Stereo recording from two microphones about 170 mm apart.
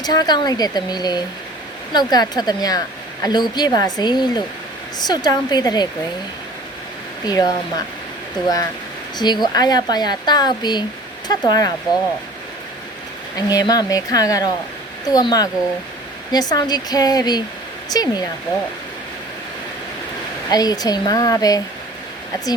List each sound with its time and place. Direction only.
0.0 s speech: 25° left (ahead or behind)
7.3 s speech: 25° left (ahead or behind)
9.1 s speech: 25° left (ahead or behind)
13.3 s speech: 20° left (ahead or behind)
20.5 s speech: 25° left (ahead or behind)